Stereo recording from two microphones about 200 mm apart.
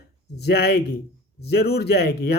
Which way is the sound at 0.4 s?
55° left (ahead or behind).